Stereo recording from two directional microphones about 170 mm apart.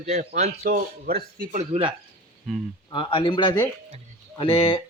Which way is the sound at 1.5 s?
40° right (ahead or behind).